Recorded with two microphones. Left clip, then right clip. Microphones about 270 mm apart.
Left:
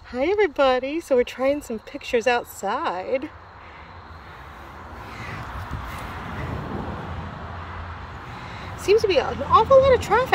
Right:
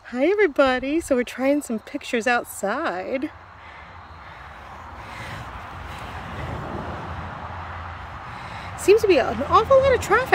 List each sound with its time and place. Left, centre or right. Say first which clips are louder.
0.1 s speech: right 2 dB; centre
8.8 s speech: right 2 dB; centre